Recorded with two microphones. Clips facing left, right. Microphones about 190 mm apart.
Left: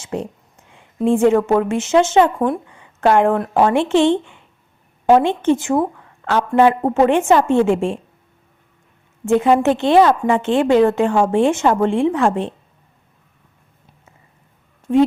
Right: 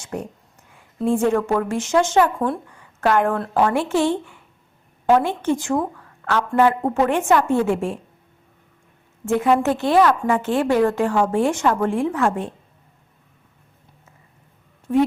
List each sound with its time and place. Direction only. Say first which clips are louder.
0.0 s a sound: left 4 dB; 25° left (ahead or behind)
0.7 s a woman's voice: left 4 dB; 25° left (ahead or behind)
9.2 s a woman's voice: left 4 dB; 25° left (ahead or behind)